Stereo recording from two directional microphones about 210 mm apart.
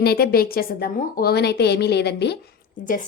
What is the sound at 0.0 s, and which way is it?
A woman's voice, 50° left (ahead or behind).